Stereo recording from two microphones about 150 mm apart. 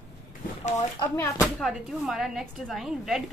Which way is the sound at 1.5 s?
Centre (ahead or behind).